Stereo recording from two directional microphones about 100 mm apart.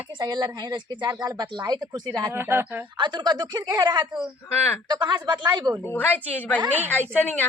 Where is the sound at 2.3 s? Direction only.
20° right (ahead or behind).